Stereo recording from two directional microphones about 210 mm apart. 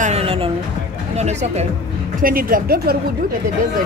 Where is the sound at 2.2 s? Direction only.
45° right (ahead or behind).